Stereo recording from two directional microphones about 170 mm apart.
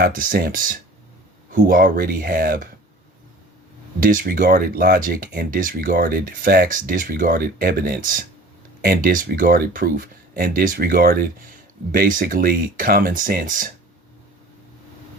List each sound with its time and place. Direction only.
0.0 s speech: 55° right (ahead or behind)
4.0 s speech: 55° right (ahead or behind)